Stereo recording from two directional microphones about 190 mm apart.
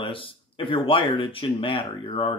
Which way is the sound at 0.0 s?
25° left (ahead or behind).